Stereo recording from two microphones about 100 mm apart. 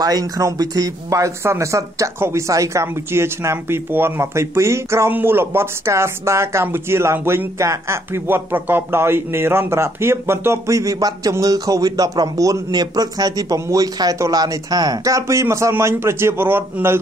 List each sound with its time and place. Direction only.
0.0 s speech: 40° right (ahead or behind); by 17.0 s 20° right (ahead or behind)